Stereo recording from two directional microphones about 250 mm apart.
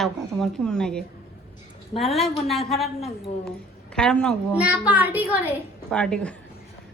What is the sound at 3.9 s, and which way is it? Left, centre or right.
A woman's voice, centre.